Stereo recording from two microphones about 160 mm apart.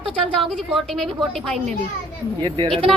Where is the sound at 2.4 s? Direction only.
30° right (ahead or behind).